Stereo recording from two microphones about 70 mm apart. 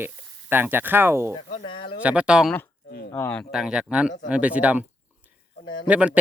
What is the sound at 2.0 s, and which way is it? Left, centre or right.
Speech, centre.